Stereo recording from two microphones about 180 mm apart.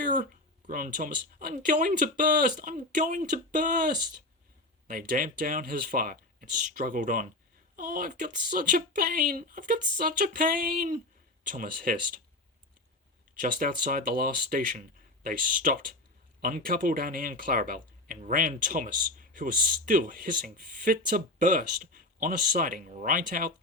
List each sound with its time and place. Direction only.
0.0 s a sound: 45° right (ahead or behind)
0.7 s speech: 50° right (ahead or behind)
13.4 s speech: 50° right (ahead or behind)